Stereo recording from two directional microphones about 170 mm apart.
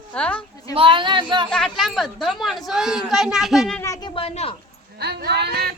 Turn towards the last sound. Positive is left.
turn(degrees=-70)  # may be behind; listen again after turning